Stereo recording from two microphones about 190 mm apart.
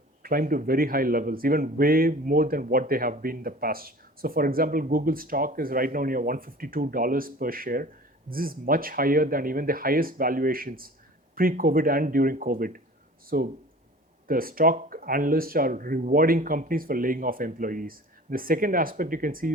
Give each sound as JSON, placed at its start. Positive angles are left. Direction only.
{"t": 0.2, "sound": "speech", "side_deg": -50}